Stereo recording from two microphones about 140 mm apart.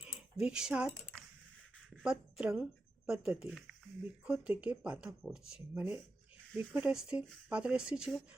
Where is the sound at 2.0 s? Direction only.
5° right (ahead or behind).